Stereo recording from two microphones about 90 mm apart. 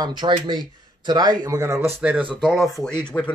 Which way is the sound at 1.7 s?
15° right (ahead or behind).